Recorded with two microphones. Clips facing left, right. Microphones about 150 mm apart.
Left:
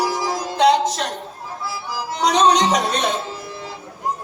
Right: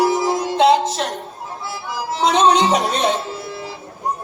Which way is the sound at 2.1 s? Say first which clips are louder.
Right 1 dB; 25° right (ahead or behind).